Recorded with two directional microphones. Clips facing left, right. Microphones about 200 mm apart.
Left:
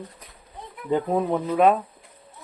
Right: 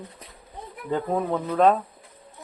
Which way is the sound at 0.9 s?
15° left (ahead or behind).